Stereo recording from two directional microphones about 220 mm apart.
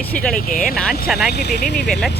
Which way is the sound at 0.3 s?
40° left (ahead or behind).